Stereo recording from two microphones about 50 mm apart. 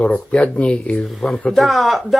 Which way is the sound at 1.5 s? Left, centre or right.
Centre.